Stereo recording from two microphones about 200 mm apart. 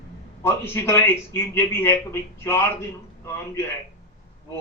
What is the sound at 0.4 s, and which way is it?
Speech, 10° left (ahead or behind).